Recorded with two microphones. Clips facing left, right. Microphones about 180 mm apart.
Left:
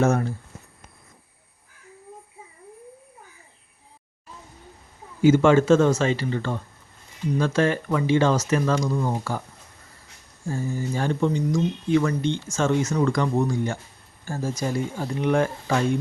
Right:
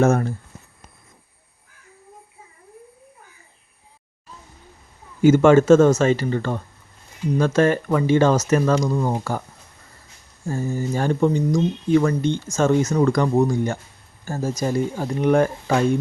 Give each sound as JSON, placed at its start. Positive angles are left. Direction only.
{"t": 0.0, "sound": "speech", "side_deg": -45}
{"t": 5.2, "sound": "speech", "side_deg": -45}
{"t": 10.5, "sound": "speech", "side_deg": -40}